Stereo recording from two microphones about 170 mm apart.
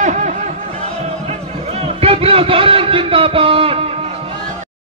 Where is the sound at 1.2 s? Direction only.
35° right (ahead or behind).